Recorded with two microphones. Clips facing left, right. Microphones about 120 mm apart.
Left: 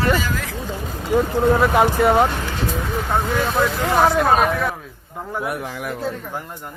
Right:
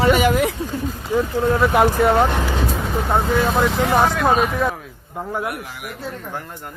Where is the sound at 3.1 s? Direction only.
15° right (ahead or behind).